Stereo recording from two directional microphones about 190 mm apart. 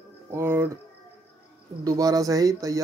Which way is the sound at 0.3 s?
10° right (ahead or behind).